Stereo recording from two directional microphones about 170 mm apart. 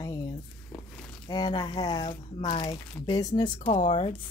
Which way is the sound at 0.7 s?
5° left (ahead or behind).